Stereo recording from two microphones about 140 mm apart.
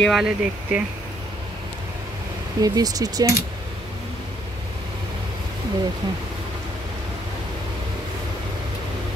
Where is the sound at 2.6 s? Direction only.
25° right (ahead or behind).